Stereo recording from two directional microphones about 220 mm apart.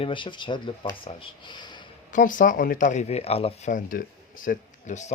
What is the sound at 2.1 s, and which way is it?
Speech, 35° left (ahead or behind).